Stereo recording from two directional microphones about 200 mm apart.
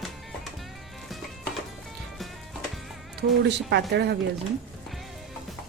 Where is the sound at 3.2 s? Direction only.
55° right (ahead or behind).